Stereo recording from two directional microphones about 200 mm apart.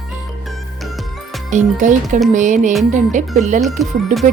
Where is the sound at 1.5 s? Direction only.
40° right (ahead or behind).